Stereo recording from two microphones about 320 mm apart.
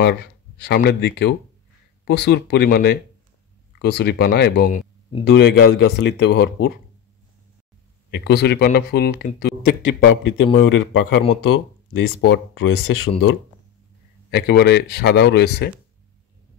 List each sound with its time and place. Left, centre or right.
0.0 s speech: left
8.1 s speech: left
11.9 s speech: left
14.3 s speech: left